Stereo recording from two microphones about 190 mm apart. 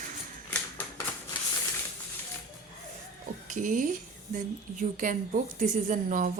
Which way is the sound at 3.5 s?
40° right (ahead or behind).